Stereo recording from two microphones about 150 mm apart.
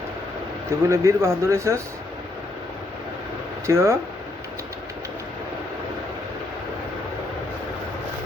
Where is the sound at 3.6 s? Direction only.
20° right (ahead or behind).